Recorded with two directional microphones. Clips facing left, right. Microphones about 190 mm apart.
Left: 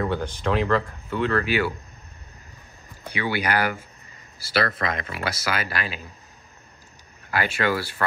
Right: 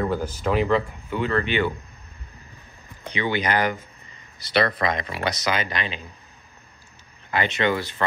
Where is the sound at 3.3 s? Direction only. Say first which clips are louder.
Right 1 dB; 10° left (ahead or behind).